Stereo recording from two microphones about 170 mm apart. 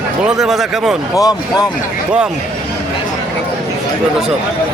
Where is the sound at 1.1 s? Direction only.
20° left (ahead or behind).